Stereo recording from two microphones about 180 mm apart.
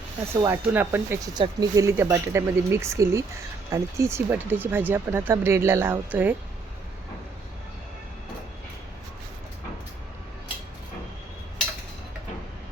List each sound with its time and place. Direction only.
0.3 s speech: 15° right (ahead or behind)